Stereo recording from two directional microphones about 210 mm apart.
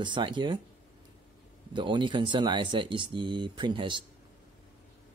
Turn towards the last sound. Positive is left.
turn(degrees=-20)  # may be behind; listen again after turning